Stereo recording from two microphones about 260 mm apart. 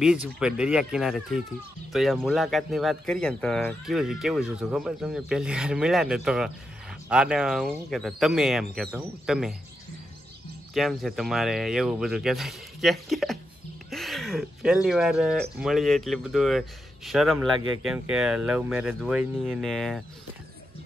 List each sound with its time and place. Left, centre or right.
0.0 s speech: centre
10.7 s speech: centre